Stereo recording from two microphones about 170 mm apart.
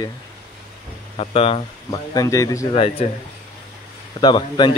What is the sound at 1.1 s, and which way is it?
Speech, 35° left (ahead or behind).